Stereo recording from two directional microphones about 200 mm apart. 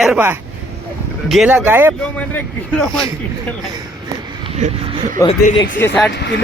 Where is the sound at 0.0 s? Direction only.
5° right (ahead or behind).